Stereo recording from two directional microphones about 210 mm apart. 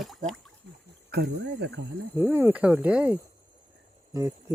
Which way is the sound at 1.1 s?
50° right (ahead or behind).